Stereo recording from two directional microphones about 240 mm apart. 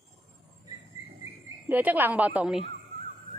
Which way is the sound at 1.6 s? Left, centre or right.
Centre.